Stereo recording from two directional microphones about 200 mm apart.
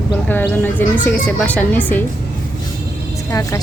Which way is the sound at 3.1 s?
15° left (ahead or behind).